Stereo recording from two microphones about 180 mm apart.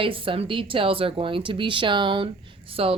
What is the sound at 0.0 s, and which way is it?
Speech, 30° right (ahead or behind).